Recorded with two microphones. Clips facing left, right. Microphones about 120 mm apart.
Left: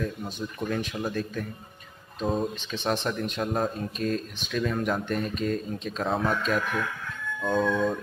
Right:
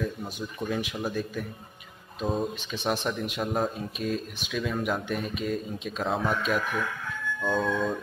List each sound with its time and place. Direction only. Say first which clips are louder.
0.4 s speech: left 1 dB; 10° right (ahead or behind)